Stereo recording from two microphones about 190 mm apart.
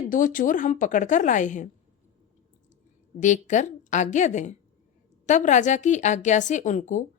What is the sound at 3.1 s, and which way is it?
A woman's voice, 40° left (ahead or behind).